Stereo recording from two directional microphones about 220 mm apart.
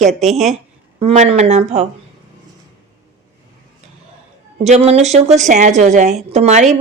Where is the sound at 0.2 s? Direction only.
30° right (ahead or behind).